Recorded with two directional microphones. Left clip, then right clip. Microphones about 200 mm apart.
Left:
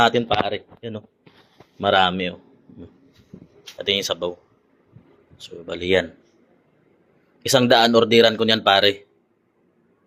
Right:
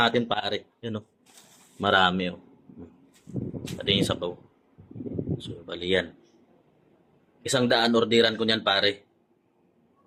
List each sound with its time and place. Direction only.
0.1 s speech: centre (ahead or behind)
0.4 s speech: 15° right (ahead or behind)
1.8 s speech: centre (ahead or behind)
3.8 s speech: centre (ahead or behind)
5.4 s speech: 15° left (ahead or behind)
7.4 s speech: 25° left (ahead or behind)